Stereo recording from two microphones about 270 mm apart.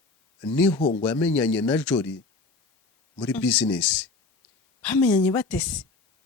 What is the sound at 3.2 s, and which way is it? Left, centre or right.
Speech, centre.